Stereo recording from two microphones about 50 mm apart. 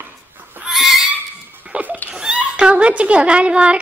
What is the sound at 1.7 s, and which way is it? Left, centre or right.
Laughter, right.